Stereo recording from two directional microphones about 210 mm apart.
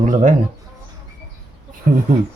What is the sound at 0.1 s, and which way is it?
Speech, 35° right (ahead or behind).